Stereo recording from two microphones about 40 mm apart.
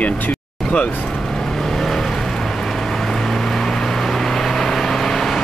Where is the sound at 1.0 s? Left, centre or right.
Centre.